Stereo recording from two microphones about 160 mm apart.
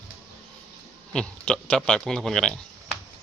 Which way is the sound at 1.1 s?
5° left (ahead or behind).